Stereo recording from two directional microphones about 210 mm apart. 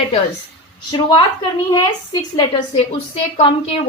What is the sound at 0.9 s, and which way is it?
A woman's voice, 20° left (ahead or behind).